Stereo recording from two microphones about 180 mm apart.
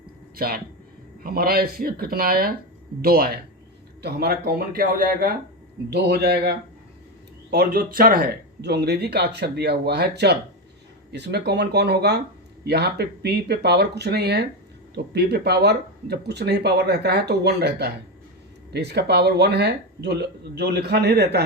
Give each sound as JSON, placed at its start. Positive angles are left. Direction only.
{"t": 0.3, "sound": "speech", "side_deg": -55}
{"t": 5.9, "sound": "speech", "side_deg": -65}
{"t": 7.5, "sound": "speech", "side_deg": -55}